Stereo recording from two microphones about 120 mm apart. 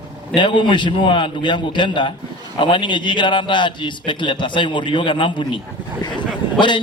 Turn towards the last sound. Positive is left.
turn(degrees=40)  # may be behind; listen again after turning